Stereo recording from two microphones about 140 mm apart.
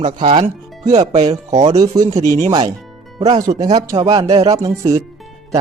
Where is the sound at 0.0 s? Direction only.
45° right (ahead or behind).